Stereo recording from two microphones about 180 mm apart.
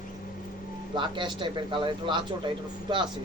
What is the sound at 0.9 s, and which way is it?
A man's voice, 25° right (ahead or behind).